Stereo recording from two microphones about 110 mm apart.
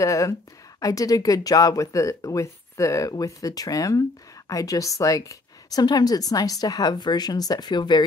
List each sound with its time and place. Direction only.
0.0 s speech: 30° left (ahead or behind)